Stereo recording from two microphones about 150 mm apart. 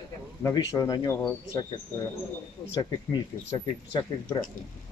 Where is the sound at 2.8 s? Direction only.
30° left (ahead or behind).